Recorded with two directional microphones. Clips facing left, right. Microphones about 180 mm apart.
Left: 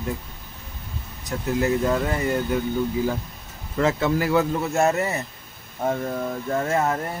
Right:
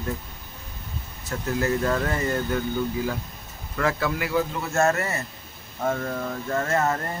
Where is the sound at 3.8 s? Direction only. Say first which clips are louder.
Left 4 dB; 25° left (ahead or behind).